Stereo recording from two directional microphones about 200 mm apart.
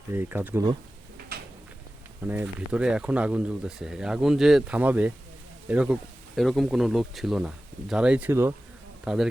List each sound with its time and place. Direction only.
0.1 s speech: 10° right (ahead or behind)
1.3 s a sound: 50° right (ahead or behind)
2.2 s speech: 10° right (ahead or behind)